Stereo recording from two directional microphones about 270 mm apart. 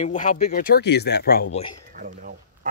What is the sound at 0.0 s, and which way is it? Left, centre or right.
Speech, left.